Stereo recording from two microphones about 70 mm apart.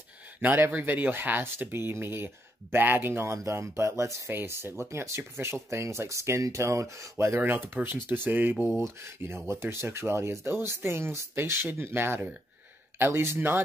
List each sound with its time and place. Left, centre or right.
0.4 s speech: right
4.3 s speech: right
7.3 s speech: right